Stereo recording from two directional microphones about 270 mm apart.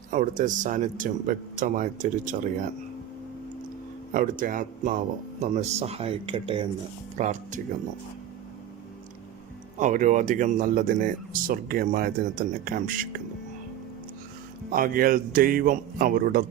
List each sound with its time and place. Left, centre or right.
0.1 s speech: right
4.1 s speech: right
9.7 s speech: right
14.7 s speech: right